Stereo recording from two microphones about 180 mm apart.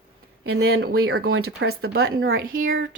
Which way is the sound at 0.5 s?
65° right (ahead or behind).